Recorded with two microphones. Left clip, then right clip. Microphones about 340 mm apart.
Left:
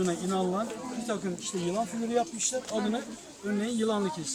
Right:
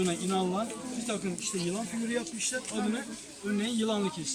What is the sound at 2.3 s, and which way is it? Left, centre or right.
Speech, centre.